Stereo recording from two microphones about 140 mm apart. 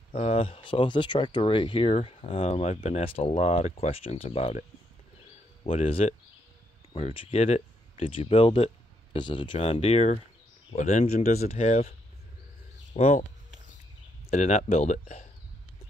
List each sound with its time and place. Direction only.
0.1 s speech: 45° left (ahead or behind)
12.9 s speech: 55° left (ahead or behind)
14.3 s speech: 60° left (ahead or behind)